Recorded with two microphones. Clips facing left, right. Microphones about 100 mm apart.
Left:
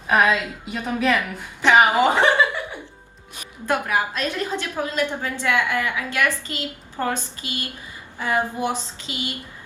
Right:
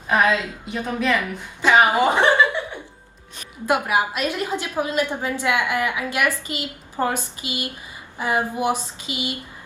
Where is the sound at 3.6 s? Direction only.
15° right (ahead or behind).